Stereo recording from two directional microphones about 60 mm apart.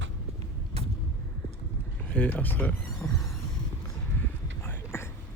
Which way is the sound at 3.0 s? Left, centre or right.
Left.